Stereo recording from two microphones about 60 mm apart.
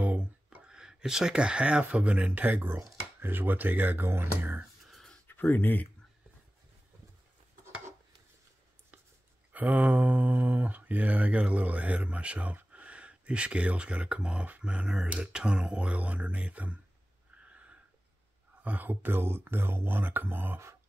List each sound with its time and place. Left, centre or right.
0.0 s speech: right
4.8 s a sound: centre
5.2 s speech: left
9.5 s speech: right
17.5 s a sound: right
18.6 s speech: right